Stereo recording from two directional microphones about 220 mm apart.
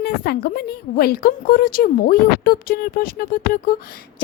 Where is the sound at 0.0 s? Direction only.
45° left (ahead or behind).